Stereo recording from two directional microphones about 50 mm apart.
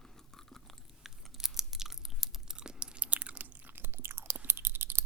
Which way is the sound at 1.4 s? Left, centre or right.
Centre.